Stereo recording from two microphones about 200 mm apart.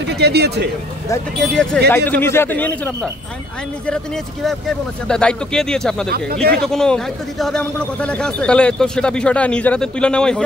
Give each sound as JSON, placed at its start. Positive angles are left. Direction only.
{"t": 0.0, "sound": "speech", "side_deg": -55}
{"t": 1.4, "sound": "a man's voice", "side_deg": 5}